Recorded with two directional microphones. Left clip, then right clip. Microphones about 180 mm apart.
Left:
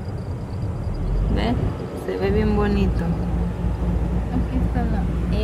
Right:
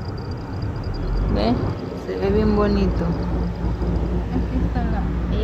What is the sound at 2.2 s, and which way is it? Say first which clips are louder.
Speech: right 3 dB; 10° left (ahead or behind).